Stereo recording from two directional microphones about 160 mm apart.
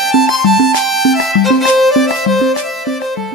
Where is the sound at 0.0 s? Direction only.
Centre (ahead or behind).